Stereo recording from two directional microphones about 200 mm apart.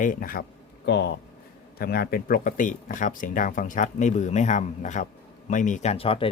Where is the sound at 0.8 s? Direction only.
60° left (ahead or behind).